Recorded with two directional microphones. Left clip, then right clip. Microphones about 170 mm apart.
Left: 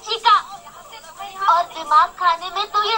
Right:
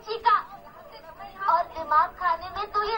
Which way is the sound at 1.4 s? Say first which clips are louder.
Left 7 dB; 25° left (ahead or behind).